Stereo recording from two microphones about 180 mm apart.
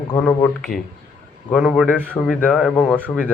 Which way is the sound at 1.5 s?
Centre (ahead or behind).